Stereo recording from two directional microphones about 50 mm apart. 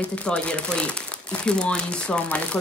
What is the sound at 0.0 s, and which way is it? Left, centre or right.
Speech, left.